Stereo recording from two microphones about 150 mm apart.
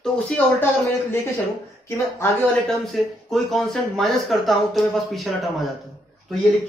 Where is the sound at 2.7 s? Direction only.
Centre (ahead or behind).